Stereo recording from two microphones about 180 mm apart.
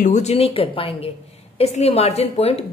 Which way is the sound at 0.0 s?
40° left (ahead or behind).